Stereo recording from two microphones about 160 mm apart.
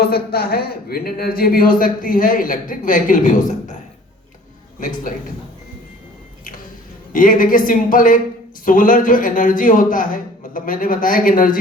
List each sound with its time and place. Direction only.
0.0 s speech: 75° left (ahead or behind); by 3.8 s 55° left (ahead or behind)
7.1 s speech: 60° left (ahead or behind)